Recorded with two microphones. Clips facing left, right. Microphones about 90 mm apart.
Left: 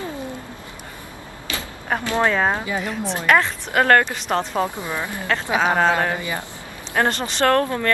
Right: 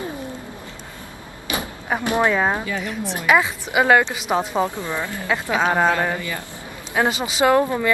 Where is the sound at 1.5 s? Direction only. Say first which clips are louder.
Right 4 dB; 15° right (ahead or behind).